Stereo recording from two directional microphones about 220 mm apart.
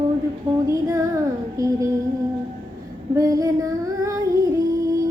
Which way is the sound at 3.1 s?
15° right (ahead or behind).